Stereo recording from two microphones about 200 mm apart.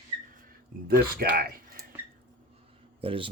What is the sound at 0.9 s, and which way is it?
Speech, 50° right (ahead or behind).